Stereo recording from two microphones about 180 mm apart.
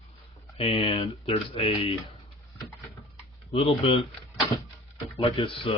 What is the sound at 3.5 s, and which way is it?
Speech, 30° left (ahead or behind).